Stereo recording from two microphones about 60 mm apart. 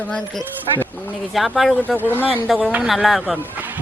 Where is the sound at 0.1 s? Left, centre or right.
Centre.